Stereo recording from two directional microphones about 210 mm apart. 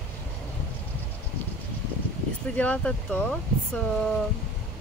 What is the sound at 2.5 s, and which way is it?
Speech, 5° left (ahead or behind).